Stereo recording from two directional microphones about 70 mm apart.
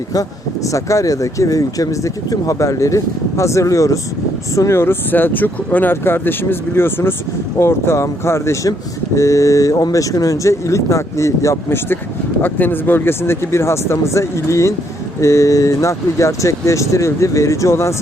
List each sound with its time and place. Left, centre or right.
0.1 s speech: left
12.4 s speech: left